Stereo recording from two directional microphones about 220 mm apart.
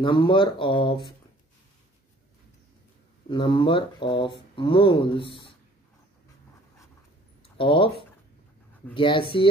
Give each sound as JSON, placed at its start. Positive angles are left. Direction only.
{"t": 0.0, "sound": "speech", "side_deg": 20}
{"t": 3.3, "sound": "speech", "side_deg": 20}
{"t": 7.5, "sound": "speech", "side_deg": 25}